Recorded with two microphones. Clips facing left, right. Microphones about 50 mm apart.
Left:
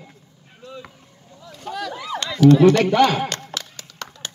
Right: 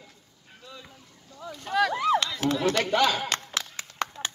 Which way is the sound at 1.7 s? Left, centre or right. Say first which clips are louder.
Right 4 dB; right.